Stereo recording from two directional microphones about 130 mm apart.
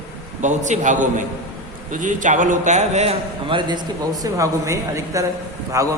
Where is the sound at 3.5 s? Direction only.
35° right (ahead or behind).